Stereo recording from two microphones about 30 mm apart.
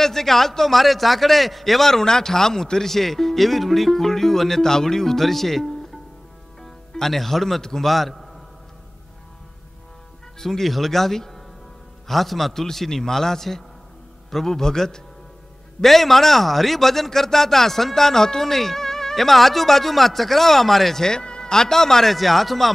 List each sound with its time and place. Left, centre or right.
0.0 s a man's voice: centre
10.4 s a man's voice: centre
15.8 s a man's voice: centre
21.0 s speech: left
22.1 s speech: centre